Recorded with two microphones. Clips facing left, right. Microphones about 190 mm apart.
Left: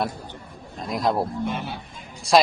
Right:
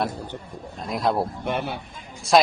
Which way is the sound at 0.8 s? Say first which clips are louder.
Even; centre (ahead or behind).